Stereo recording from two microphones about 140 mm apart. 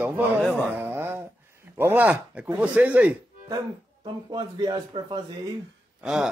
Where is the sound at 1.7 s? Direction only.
15° right (ahead or behind).